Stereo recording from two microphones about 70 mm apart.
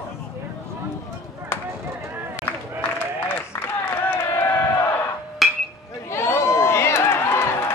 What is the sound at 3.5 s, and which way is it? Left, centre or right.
Crowd, left.